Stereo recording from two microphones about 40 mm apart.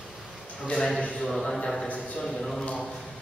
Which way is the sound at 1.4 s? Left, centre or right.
Centre.